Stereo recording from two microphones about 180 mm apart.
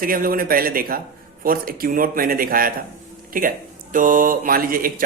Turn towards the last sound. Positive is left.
turn(degrees=-55)  # may be behind; listen again after turning